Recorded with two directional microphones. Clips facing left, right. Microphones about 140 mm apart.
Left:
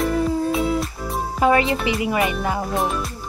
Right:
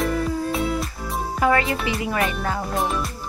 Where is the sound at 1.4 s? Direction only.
20° left (ahead or behind).